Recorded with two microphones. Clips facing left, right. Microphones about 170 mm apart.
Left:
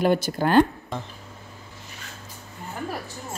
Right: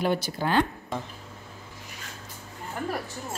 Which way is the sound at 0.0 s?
45° left (ahead or behind).